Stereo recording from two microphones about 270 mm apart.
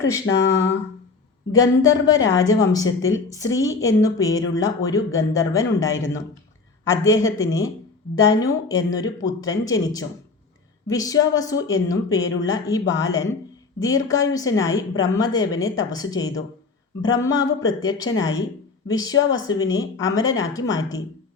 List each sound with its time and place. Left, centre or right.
0.0 s a woman's voice: centre
0.3 s speech: left
1.9 s a woman's voice: centre
6.9 s a woman's voice: centre